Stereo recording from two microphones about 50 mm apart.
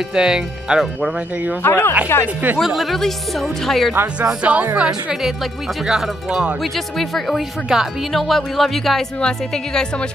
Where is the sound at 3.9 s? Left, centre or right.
Right.